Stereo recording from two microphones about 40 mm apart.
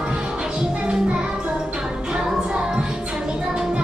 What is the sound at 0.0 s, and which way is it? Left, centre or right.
Music, right.